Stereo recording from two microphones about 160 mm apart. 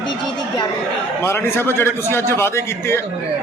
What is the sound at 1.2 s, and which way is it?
A man's voice, 15° left (ahead or behind).